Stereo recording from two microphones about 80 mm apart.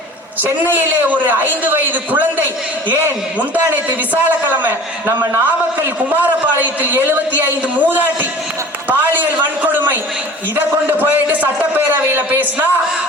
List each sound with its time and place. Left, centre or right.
0.6 s a man's voice: right
4.1 s a man's voice: right
5.8 s a man's voice: right
10.9 s a man's voice: right